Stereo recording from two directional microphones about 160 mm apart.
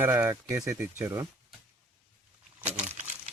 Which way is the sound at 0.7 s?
15° right (ahead or behind).